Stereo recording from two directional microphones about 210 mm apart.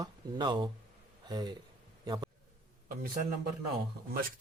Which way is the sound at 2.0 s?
20° right (ahead or behind).